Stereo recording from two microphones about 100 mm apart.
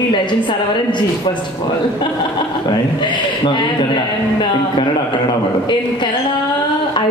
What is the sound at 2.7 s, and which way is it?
A man's voice, 50° left (ahead or behind).